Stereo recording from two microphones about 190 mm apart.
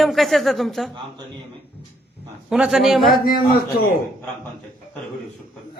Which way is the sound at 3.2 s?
50° left (ahead or behind).